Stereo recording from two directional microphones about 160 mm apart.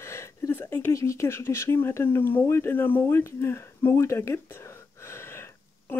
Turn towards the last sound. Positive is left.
turn(degrees=15)  # may be behind; listen again after turning